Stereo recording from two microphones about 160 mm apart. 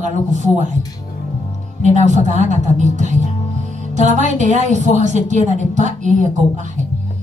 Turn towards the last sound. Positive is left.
turn(degrees=-50)  # may be behind; listen again after turning